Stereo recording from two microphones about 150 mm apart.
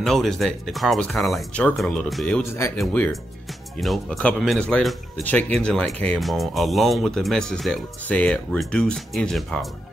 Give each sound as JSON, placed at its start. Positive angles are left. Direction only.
{"t": 0.0, "sound": "speech", "side_deg": 0}
{"t": 2.5, "sound": "speech", "side_deg": 15}
{"t": 2.8, "sound": "speech", "side_deg": 5}